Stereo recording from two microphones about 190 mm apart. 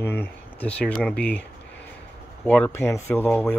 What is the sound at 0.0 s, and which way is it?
Speech, 10° left (ahead or behind).